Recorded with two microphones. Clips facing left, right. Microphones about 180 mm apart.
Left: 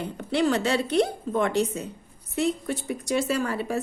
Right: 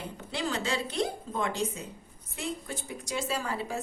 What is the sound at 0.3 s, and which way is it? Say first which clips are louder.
A woman's voice: left 9 dB; 65° left (ahead or behind).